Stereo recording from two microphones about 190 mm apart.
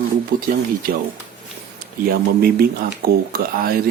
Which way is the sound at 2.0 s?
55° right (ahead or behind).